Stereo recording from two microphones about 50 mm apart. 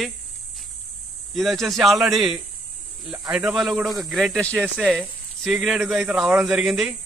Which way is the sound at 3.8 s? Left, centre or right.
Centre.